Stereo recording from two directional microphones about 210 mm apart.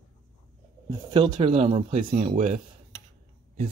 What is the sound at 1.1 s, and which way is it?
Speech, 25° right (ahead or behind).